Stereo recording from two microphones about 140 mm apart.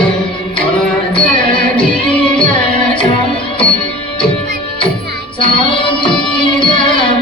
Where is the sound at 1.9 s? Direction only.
10° left (ahead or behind).